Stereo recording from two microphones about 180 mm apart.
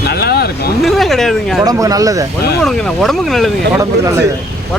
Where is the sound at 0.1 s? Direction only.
60° left (ahead or behind).